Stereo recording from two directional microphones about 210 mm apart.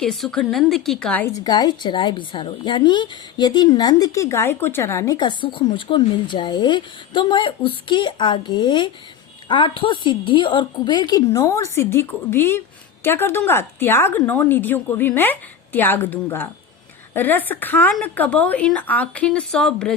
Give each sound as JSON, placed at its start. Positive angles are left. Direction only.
{"t": 0.0, "sound": "a woman's voice", "side_deg": 0}